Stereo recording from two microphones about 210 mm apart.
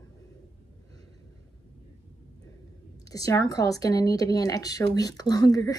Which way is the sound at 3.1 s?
15° left (ahead or behind).